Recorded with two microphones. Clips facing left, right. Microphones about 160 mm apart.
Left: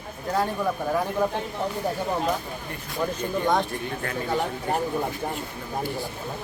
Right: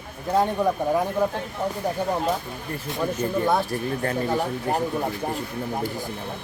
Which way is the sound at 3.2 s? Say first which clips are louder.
Right 2 dB; 5° right (ahead or behind).